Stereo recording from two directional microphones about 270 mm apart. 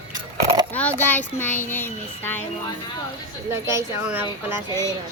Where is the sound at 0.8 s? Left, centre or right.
Centre.